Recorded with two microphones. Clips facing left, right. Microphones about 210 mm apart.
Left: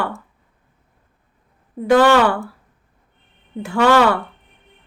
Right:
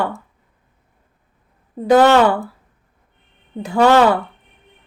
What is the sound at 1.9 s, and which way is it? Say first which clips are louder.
Speech: right 2 dB; 20° right (ahead or behind).